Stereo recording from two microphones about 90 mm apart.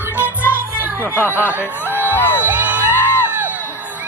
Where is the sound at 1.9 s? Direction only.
25° right (ahead or behind).